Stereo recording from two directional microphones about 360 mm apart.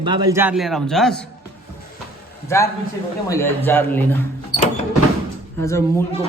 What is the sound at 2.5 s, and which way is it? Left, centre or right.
A woman's voice, centre.